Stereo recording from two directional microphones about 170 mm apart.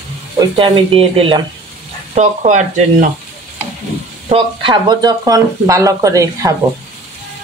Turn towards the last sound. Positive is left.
turn(degrees=-20)  # may be behind; listen again after turning